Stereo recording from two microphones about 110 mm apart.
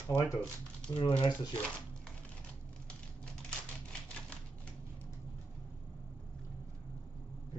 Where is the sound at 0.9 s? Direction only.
50° left (ahead or behind).